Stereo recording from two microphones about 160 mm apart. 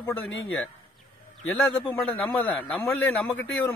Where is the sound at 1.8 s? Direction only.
10° left (ahead or behind).